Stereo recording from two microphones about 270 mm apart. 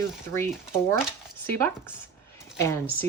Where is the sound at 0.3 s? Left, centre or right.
Centre.